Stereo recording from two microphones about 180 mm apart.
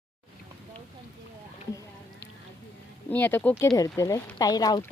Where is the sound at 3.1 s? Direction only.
10° left (ahead or behind).